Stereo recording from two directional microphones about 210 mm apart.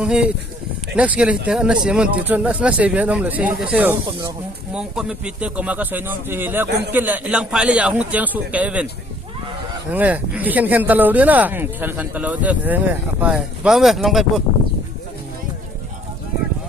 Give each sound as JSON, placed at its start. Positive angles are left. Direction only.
{"t": 0.0, "sound": "speech", "side_deg": -5}
{"t": 6.7, "sound": "a man's voice", "side_deg": -50}
{"t": 6.9, "sound": "speech", "side_deg": -10}
{"t": 9.9, "sound": "speech", "side_deg": -5}